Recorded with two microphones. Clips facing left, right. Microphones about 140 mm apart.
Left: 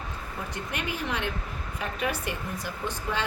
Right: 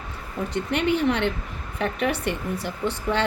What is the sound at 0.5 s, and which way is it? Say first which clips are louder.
Speech: right 12 dB; 65° right (ahead or behind).